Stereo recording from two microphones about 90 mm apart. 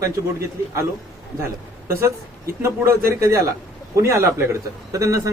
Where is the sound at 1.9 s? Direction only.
30° right (ahead or behind).